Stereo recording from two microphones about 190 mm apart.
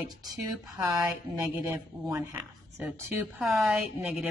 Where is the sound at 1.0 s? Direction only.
5° right (ahead or behind).